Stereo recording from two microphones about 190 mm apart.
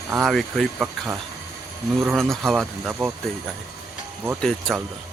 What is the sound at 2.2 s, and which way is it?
Speech, centre (ahead or behind).